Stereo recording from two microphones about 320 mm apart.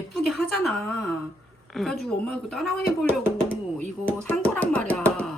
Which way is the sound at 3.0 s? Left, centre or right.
Centre.